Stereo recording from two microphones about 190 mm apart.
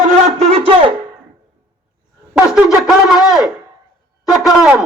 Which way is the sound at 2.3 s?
5° right (ahead or behind).